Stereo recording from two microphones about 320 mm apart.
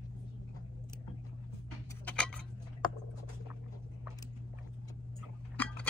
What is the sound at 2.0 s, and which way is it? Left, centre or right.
Tick-tock, centre.